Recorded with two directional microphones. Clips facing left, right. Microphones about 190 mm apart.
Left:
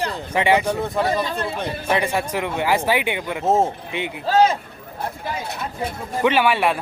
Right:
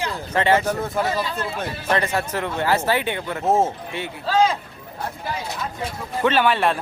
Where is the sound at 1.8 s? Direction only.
15° left (ahead or behind).